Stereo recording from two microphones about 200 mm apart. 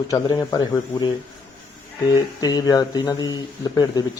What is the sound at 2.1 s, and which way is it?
A man's voice, 20° left (ahead or behind).